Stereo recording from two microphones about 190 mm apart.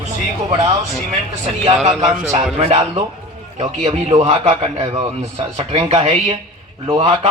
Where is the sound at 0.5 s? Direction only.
35° right (ahead or behind).